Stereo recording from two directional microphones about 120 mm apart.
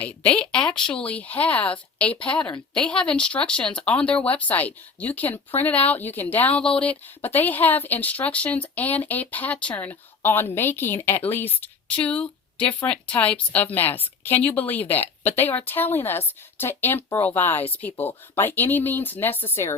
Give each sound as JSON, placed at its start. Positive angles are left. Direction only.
{"t": 0.0, "sound": "speech", "side_deg": 10}